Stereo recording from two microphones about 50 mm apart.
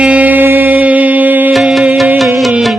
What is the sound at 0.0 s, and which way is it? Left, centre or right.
Music, right.